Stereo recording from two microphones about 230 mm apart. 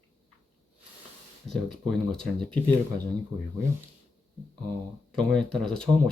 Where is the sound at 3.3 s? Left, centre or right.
Centre.